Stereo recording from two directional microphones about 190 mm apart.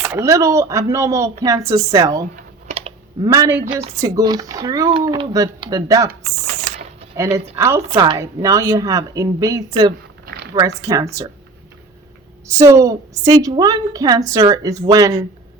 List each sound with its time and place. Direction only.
0.0 s a woman's voice: 15° right (ahead or behind)
2.3 s typing: 30° right (ahead or behind)
3.2 s speech: 15° right (ahead or behind)
7.5 s a woman's voice: 15° right (ahead or behind)
10.2 s a sound: 60° right (ahead or behind)
10.8 s a woman's voice: 15° right (ahead or behind)
12.5 s speech: 15° right (ahead or behind)